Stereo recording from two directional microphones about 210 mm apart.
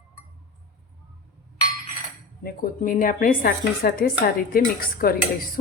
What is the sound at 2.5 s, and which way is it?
Speech, 40° left (ahead or behind).